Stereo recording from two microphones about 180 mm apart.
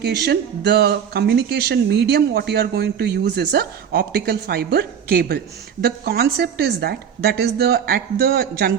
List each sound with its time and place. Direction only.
0.0 s speech: 65° right (ahead or behind)